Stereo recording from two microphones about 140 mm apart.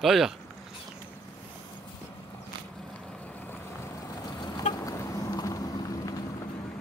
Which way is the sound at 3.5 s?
20° left (ahead or behind).